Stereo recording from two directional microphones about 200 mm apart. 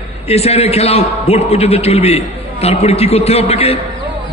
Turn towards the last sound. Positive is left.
turn(degrees=30)  # may be behind; listen again after turning